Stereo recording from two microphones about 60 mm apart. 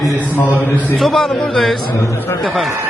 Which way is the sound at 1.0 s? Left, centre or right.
Centre.